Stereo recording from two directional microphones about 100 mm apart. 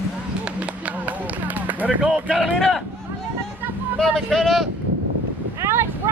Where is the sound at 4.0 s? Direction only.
5° left (ahead or behind).